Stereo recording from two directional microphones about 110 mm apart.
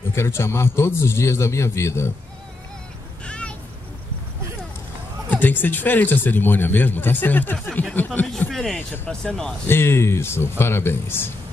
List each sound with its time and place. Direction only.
0.1 s a man's voice: 25° left (ahead or behind)
3.3 s a sound: 10° left (ahead or behind)
5.3 s a man's voice: 15° left (ahead or behind)
8.5 s speech: centre (ahead or behind)
8.7 s a man's voice: 15° left (ahead or behind)
9.7 s a man's voice: 20° left (ahead or behind)